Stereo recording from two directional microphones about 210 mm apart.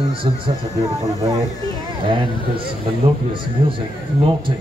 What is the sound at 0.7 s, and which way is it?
Speech, 15° right (ahead or behind).